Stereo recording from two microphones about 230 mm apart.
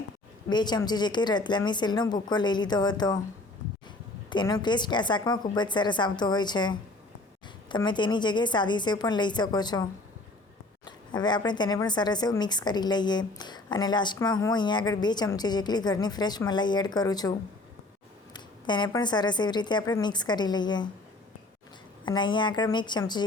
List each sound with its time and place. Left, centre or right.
0.5 s speech: centre
4.3 s speech: centre
10.8 s speech: centre
18.3 s speech: centre
22.0 s speech: centre